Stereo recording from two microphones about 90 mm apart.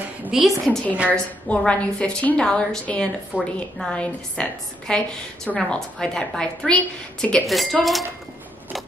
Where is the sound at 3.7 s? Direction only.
10° left (ahead or behind).